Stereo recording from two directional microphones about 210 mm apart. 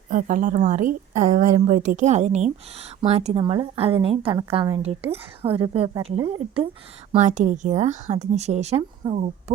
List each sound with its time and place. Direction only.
0.1 s a woman's voice: 40° right (ahead or behind)
7.1 s speech: 35° right (ahead or behind)